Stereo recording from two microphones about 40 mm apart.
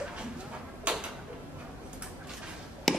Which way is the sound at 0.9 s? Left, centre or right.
Right.